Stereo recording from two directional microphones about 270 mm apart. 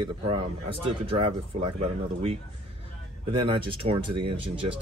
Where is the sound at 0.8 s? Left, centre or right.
Centre.